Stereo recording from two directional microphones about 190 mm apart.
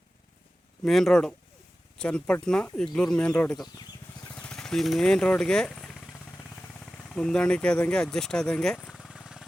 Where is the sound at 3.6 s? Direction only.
20° left (ahead or behind).